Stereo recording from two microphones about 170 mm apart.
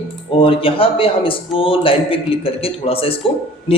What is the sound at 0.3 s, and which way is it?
A man's voice, 30° left (ahead or behind).